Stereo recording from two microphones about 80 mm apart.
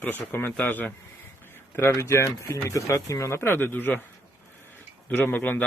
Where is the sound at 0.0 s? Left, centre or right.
Left.